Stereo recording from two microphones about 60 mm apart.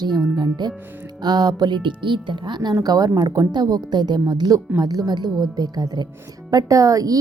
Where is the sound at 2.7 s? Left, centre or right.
Right.